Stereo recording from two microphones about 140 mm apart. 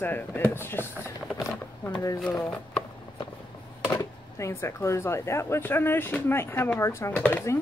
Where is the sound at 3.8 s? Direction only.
20° left (ahead or behind).